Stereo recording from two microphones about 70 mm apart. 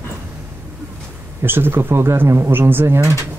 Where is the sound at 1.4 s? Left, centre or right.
Right.